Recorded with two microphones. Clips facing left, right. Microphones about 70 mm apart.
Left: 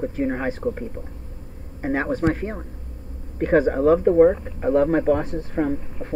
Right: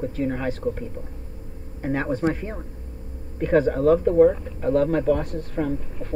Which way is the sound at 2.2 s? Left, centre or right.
Left.